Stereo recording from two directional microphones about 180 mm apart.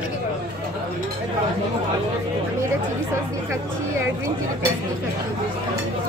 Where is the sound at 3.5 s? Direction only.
15° right (ahead or behind).